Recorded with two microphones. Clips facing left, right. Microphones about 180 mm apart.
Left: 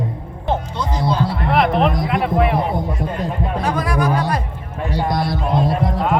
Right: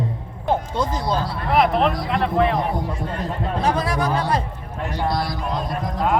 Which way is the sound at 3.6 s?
30° right (ahead or behind).